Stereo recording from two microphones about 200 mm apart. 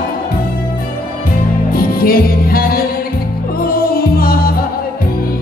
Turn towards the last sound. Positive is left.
turn(degrees=45)  # may be behind; listen again after turning